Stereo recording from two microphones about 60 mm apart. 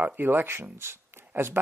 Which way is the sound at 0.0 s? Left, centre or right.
Right.